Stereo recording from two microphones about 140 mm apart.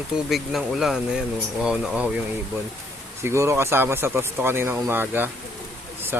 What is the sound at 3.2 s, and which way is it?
Speech, 20° right (ahead or behind).